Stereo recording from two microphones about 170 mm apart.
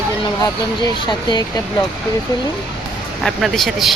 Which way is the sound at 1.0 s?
25° left (ahead or behind).